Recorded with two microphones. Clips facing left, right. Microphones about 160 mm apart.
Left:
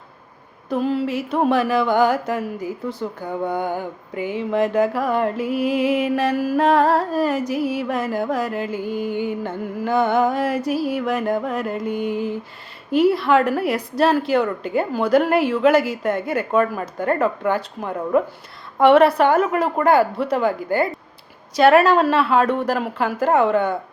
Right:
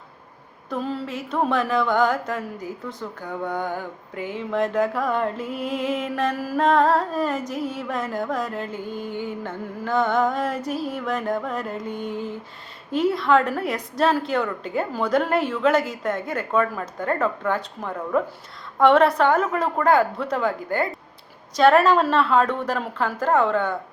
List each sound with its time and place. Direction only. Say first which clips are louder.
0.7 s a woman's voice: left 7 dB; 5° left (ahead or behind)
5.8 s music: left 5 dB; 65° left (ahead or behind)
6.1 s a woman's voice: left 5 dB; centre (ahead or behind)
7.4 s music: left 6 dB; 70° left (ahead or behind)
7.8 s a woman's voice: left 4 dB; 5° left (ahead or behind)